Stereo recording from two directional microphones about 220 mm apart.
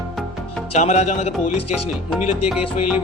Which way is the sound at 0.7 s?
30° left (ahead or behind).